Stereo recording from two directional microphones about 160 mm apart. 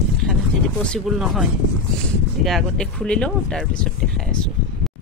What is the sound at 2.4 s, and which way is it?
Speech, 5° left (ahead or behind).